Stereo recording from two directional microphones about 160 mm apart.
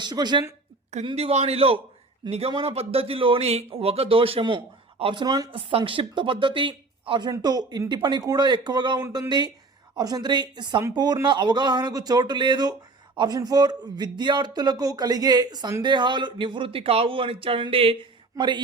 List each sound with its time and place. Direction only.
0.0 s speech: 25° right (ahead or behind)
1.0 s a man's voice: 40° right (ahead or behind)
9.0 s speech: 15° right (ahead or behind)